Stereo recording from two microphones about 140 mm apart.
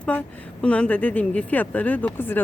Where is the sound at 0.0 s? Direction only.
10° left (ahead or behind).